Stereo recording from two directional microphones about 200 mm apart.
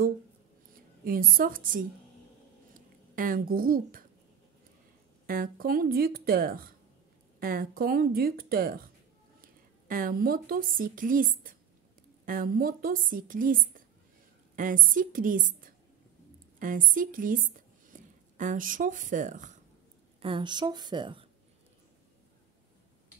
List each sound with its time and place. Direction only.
0.7 s a woman's voice: 45° right (ahead or behind)
5.2 s a woman's voice: 45° right (ahead or behind)
20.2 s a woman's voice: 25° right (ahead or behind)